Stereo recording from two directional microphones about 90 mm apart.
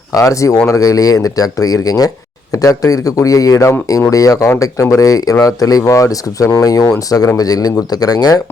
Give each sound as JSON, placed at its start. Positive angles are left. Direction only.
{"t": 0.1, "sound": "speech", "side_deg": 40}